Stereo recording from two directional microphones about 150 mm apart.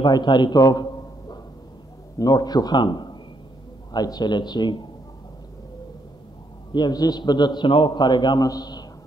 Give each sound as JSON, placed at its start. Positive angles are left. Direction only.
{"t": 0.0, "sound": "a man's voice", "side_deg": 30}
{"t": 2.1, "sound": "a man's voice", "side_deg": 25}
{"t": 6.7, "sound": "a man's voice", "side_deg": 25}